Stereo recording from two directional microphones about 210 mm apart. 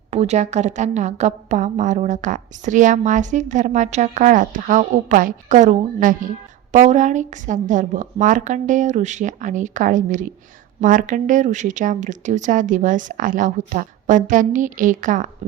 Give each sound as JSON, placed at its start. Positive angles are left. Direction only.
{"t": 0.1, "sound": "a woman's voice", "side_deg": -30}